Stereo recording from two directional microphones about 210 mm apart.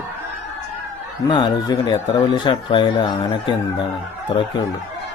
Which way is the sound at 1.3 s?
20° left (ahead or behind).